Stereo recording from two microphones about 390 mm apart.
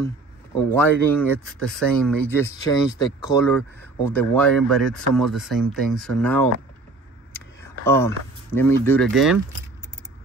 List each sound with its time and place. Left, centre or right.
0.7 s speech: centre
7.3 s a sound: centre
8.5 s speech: centre